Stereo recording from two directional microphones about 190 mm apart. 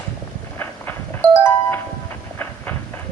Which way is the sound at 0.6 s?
10° left (ahead or behind).